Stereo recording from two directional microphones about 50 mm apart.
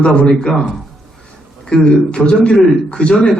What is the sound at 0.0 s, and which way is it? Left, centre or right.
Speech, left.